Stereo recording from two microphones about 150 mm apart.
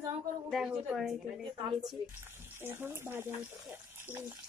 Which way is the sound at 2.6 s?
15° right (ahead or behind).